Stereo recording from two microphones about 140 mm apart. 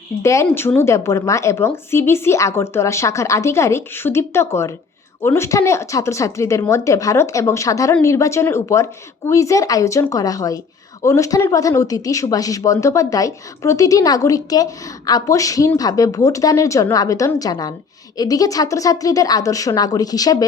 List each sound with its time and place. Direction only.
0.2 s speech: 20° left (ahead or behind)